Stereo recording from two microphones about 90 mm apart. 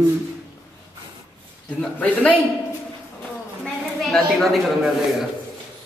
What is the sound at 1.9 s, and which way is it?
Speech, 15° left (ahead or behind).